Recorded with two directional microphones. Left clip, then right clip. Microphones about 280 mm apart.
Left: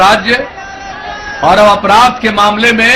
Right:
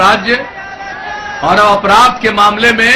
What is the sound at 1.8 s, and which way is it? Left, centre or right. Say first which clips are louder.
Speech: even; centre.